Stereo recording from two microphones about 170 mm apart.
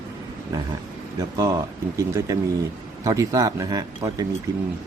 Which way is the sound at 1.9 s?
20° right (ahead or behind).